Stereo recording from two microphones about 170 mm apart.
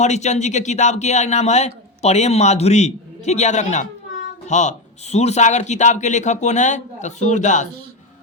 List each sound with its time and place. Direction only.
0.0 s a man's voice: 45° left (ahead or behind)